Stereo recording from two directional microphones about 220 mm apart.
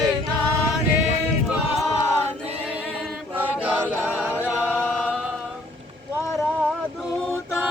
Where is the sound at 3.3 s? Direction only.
5° right (ahead or behind).